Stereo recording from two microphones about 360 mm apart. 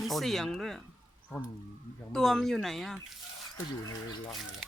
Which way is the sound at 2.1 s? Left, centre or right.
Centre.